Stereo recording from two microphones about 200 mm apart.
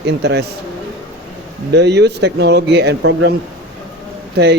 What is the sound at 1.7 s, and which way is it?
Speech, 60° right (ahead or behind).